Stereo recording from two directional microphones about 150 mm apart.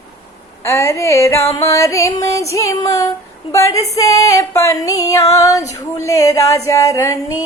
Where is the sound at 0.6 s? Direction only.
20° left (ahead or behind).